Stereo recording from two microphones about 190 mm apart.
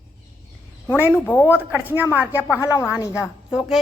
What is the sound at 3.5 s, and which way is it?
Speech, centre (ahead or behind).